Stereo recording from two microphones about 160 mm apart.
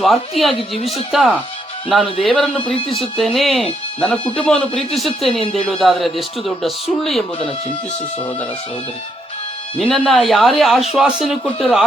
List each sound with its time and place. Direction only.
0.0 s speech: centre (ahead or behind)
2.7 s speech: 35° left (ahead or behind)
3.2 s speech: centre (ahead or behind)
9.7 s speech: 5° left (ahead or behind)